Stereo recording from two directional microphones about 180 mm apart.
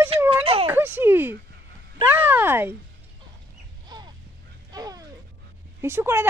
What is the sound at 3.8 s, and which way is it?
Crow, 25° right (ahead or behind).